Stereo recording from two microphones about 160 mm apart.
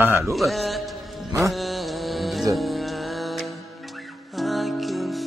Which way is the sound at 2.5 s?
Centre (ahead or behind).